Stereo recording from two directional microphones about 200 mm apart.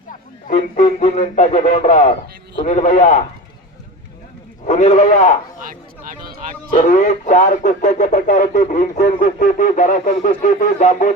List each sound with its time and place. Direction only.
0.4 s speech: 35° left (ahead or behind)
4.6 s speech: 35° left (ahead or behind)
6.8 s speech: 40° left (ahead or behind)